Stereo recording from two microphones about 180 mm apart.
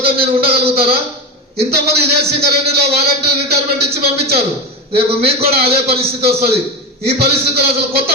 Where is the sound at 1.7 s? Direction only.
60° right (ahead or behind).